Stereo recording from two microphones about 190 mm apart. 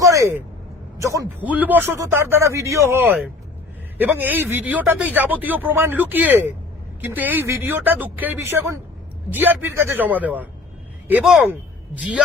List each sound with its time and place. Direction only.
0.0 s a man's voice: 15° right (ahead or behind)